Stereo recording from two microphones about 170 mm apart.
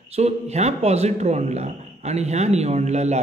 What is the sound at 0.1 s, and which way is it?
A man's voice, 40° right (ahead or behind).